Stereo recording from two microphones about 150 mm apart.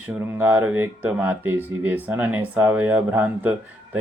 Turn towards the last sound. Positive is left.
turn(degrees=-10)  # may be behind; listen again after turning